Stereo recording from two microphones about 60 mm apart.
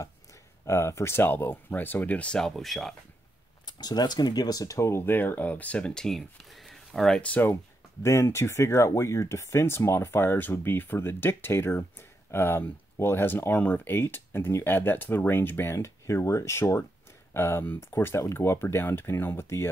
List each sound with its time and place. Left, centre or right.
0.7 s speech: left; by 2.9 s centre
3.9 s speech: left
4.8 s speech: left
5.1 s speech: left
6.0 s speech: centre
7.2 s speech: left
8.0 s speech: left